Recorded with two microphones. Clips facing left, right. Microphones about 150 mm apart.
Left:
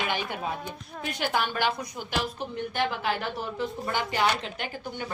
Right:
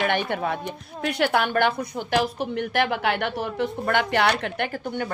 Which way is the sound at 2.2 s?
80° right.